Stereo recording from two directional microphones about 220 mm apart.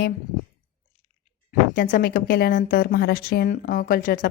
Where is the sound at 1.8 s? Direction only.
45° left (ahead or behind).